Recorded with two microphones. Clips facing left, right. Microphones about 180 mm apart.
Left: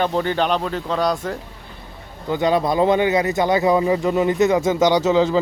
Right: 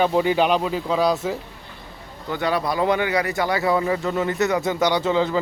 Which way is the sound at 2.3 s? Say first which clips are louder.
Left 5 dB; 20° left (ahead or behind).